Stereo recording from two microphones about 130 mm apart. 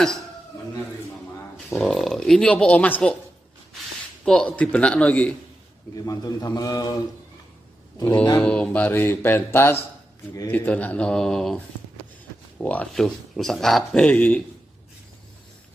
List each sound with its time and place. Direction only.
1.7 s speech: centre (ahead or behind)
4.2 s speech: 5° left (ahead or behind)
5.9 s a man's voice: 30° left (ahead or behind)
8.4 s speech: 10° left (ahead or behind)